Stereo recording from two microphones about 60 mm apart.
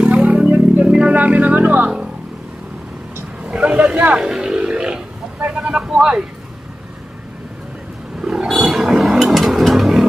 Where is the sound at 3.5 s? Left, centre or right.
Centre.